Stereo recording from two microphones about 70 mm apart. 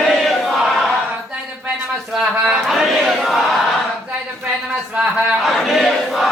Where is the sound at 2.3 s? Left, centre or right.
Centre.